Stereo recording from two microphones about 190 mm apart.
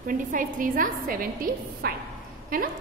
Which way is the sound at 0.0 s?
45° right (ahead or behind).